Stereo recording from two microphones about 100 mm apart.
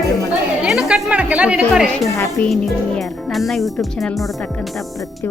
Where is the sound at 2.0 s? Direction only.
30° left (ahead or behind).